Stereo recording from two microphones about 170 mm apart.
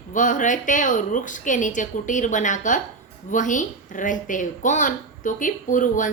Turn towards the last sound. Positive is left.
turn(degrees=50)  # may be behind; listen again after turning